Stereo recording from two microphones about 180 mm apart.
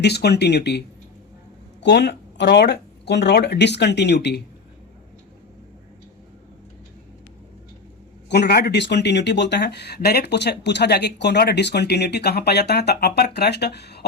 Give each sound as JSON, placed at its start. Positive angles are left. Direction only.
{"t": 0.0, "sound": "speech", "side_deg": 65}
{"t": 8.3, "sound": "speech", "side_deg": 65}